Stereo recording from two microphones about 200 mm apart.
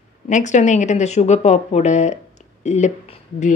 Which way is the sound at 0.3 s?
35° left (ahead or behind).